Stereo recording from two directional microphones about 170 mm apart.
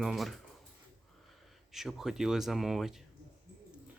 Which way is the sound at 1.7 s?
Centre (ahead or behind).